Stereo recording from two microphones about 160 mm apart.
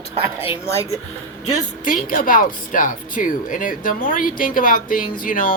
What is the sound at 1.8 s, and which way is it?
Speech, 60° left (ahead or behind).